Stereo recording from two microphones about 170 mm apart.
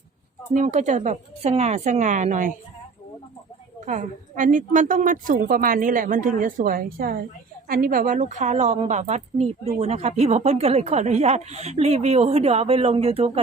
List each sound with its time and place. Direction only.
0.5 s a woman's voice: 45° right (ahead or behind)
3.8 s a woman's voice: 45° right (ahead or behind)